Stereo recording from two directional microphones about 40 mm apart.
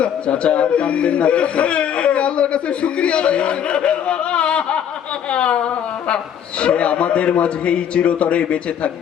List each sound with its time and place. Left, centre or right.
0.0 s a man's voice: left